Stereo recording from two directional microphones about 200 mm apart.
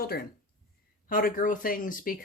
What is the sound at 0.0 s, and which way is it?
Speech, 50° left (ahead or behind).